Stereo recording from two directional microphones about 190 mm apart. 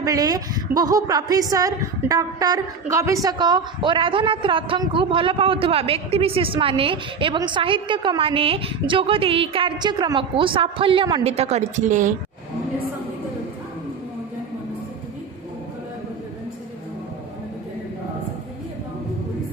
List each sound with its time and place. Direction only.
0.0 s a woman's voice: 20° right (ahead or behind); by 12.1 s 40° right (ahead or behind)